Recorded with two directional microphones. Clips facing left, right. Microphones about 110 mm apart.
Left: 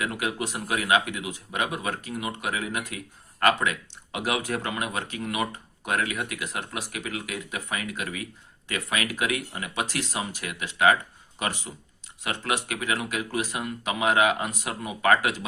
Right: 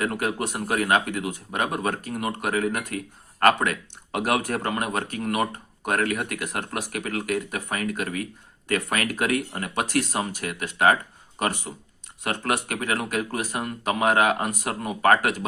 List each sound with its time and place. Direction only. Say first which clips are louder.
0.0 s speech: right 3 dB; 45° right (ahead or behind)